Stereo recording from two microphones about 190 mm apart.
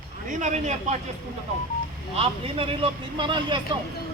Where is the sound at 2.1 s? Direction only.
30° right (ahead or behind).